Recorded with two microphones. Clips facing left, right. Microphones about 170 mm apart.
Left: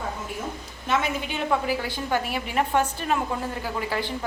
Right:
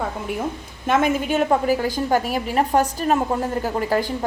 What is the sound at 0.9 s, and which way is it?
A woman's voice, 50° right (ahead or behind).